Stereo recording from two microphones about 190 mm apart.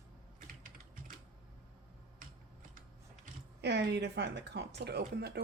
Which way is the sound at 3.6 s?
65° right (ahead or behind).